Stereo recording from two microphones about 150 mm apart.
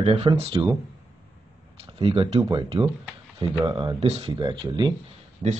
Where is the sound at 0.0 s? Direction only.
40° right (ahead or behind).